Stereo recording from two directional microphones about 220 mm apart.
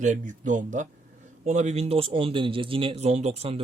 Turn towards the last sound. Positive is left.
turn(degrees=-30)  # may be behind; listen again after turning